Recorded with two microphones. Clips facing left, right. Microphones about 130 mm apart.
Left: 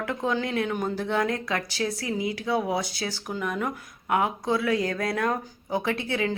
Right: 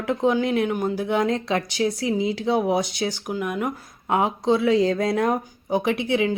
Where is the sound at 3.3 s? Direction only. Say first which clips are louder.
Even; 10° right (ahead or behind).